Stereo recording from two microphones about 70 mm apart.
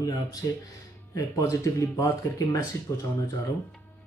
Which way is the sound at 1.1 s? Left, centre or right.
Left.